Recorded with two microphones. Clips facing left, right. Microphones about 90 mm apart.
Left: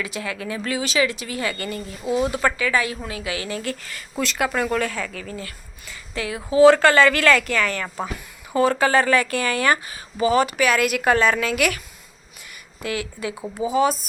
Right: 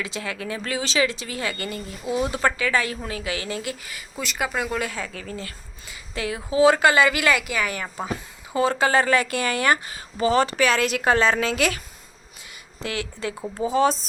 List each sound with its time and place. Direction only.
0.0 s speech: 25° right (ahead or behind)
1.7 s speech: 30° left (ahead or behind)
2.3 s a woman's voice: 30° right (ahead or behind); by 4.0 s 15° right (ahead or behind)
4.2 s speech: 5° right (ahead or behind)
4.7 s speech: 20° right (ahead or behind)
6.6 s a woman's voice: 15° right (ahead or behind)
9.9 s a woman's voice: 35° right (ahead or behind)
12.8 s speech: 30° right (ahead or behind)
13.3 s speech: 5° left (ahead or behind)
13.7 s a woman's voice: 35° right (ahead or behind)